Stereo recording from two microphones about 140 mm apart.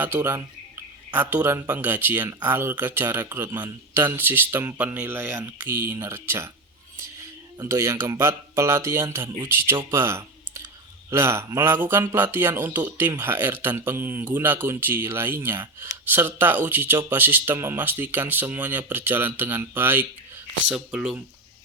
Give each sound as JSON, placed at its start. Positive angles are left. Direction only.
{"t": 0.0, "sound": "speech", "side_deg": -15}
{"t": 9.9, "sound": "clicking", "side_deg": -20}
{"t": 11.1, "sound": "speech", "side_deg": -20}